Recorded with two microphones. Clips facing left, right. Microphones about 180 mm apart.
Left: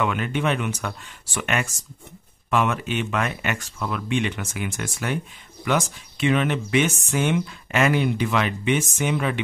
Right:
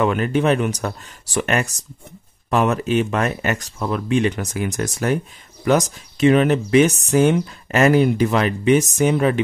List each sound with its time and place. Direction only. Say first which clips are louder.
0.0 s speech: right 6 dB; 40° right (ahead or behind)